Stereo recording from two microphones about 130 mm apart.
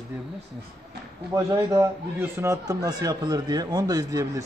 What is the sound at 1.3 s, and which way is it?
A man's voice, 20° right (ahead or behind).